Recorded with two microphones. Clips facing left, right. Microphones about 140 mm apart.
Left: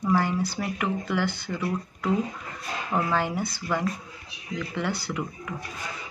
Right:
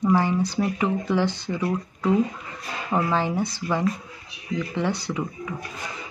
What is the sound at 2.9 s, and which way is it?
A woman's voice, 20° right (ahead or behind).